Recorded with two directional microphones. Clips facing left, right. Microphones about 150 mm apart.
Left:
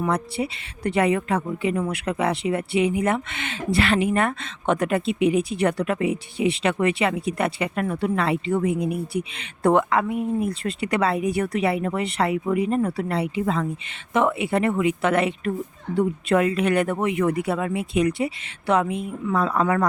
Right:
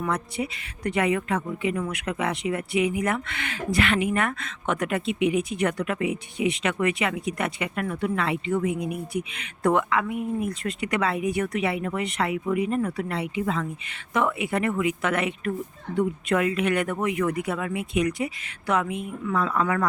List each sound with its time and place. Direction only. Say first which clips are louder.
0.0 s speech: left 4 dB; 30° left (ahead or behind)
13.9 s speech: left 3 dB; 25° left (ahead or behind)